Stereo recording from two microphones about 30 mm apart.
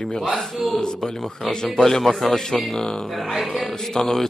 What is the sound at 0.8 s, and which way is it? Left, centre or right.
A man's voice, left.